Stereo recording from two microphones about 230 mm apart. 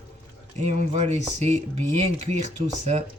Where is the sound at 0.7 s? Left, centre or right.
Right.